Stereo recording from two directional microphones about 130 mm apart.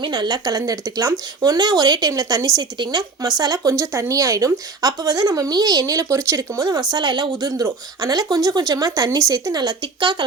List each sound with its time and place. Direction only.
0.0 s speech: 35° right (ahead or behind)